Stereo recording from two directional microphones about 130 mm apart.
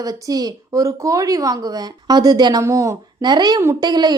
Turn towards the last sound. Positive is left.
turn(degrees=-35)  # may be behind; listen again after turning